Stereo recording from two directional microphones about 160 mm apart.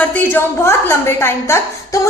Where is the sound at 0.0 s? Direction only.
10° left (ahead or behind).